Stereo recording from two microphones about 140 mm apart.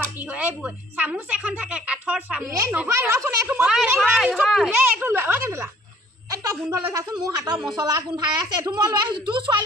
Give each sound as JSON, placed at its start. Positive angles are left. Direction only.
{"t": 0.3, "sound": "a woman's voice", "side_deg": -10}
{"t": 2.5, "sound": "a woman's voice", "side_deg": -25}
{"t": 5.0, "sound": "a woman's voice", "side_deg": -15}